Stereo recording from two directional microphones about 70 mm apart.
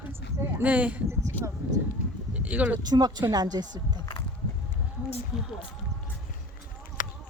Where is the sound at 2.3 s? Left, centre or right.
Centre.